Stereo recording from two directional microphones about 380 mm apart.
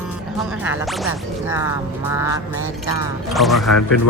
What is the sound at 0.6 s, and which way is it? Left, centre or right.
Speech, centre.